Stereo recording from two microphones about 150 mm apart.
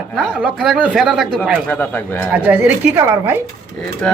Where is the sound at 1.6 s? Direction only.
10° left (ahead or behind).